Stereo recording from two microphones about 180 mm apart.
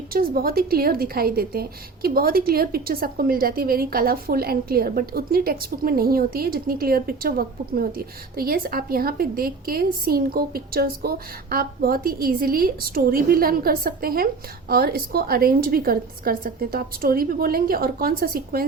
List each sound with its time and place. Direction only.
0.1 s a woman's voice: 55° right (ahead or behind)